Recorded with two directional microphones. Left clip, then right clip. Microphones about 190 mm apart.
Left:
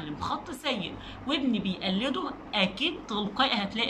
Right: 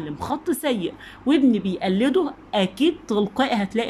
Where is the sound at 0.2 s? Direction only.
40° right (ahead or behind).